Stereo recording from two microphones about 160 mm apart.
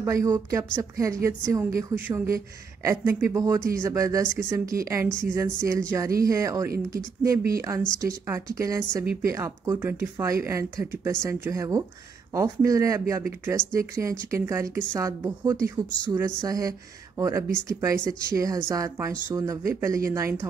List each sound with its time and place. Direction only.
0.0 s speech: 20° right (ahead or behind)
8.3 s speech: 20° right (ahead or behind)